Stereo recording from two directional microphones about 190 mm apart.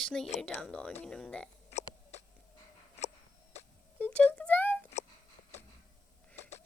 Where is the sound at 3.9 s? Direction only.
5° left (ahead or behind).